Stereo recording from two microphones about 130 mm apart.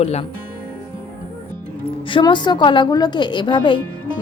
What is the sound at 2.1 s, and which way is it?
A woman's voice, 35° left (ahead or behind).